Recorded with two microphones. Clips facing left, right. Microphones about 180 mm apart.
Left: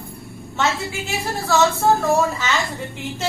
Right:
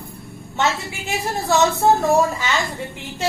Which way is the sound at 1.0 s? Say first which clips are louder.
Right 4 dB; 20° right (ahead or behind).